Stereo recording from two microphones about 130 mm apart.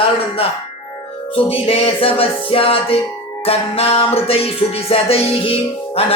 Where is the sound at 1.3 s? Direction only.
50° left (ahead or behind).